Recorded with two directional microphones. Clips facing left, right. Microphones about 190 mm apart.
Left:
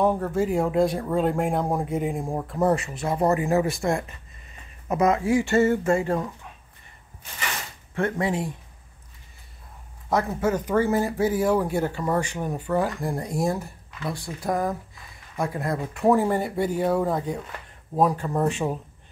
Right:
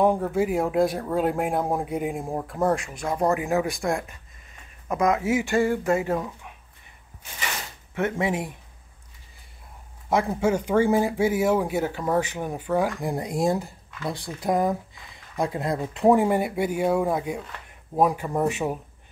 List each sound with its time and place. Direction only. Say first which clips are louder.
0.0 s speech: right 1 dB; 15° right (ahead or behind); by 5.2 s 5° left (ahead or behind)
5.2 s a sound: left 2 dB; 20° right (ahead or behind)
5.5 s speech: left 2 dB; centre (ahead or behind)
7.9 s speech: even; 10° right (ahead or behind)
10.0 s speech: right 1 dB; 10° right (ahead or behind)